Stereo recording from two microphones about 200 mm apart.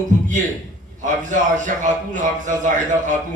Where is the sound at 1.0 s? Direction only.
40° right (ahead or behind).